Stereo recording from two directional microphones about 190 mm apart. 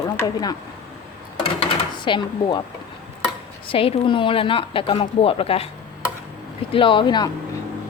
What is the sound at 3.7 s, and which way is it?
A woman's voice, 30° left (ahead or behind).